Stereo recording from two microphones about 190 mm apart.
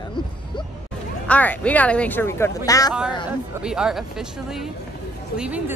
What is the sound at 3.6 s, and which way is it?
A woman's voice, 5° right (ahead or behind).